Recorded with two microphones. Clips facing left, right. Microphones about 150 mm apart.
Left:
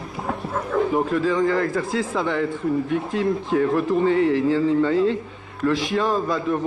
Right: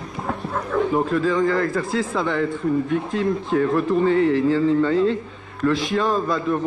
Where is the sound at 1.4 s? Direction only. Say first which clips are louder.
Even; 35° left (ahead or behind).